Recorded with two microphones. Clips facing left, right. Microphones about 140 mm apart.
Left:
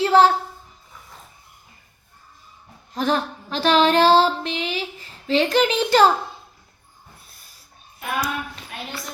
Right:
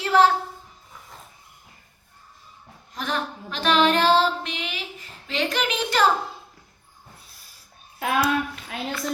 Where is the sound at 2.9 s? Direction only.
35° left (ahead or behind).